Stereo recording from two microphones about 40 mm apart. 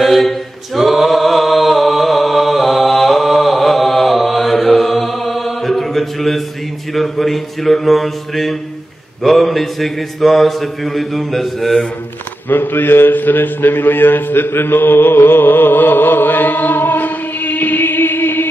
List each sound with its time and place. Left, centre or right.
0.0 s mantra: centre
6.9 s a sound: centre
9.2 s mantra: centre
12.4 s a man's voice: left